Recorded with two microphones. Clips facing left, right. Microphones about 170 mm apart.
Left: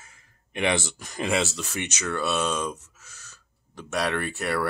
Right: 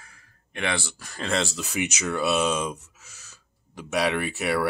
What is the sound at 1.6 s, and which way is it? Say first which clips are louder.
Speech: right 3 dB; 10° right (ahead or behind).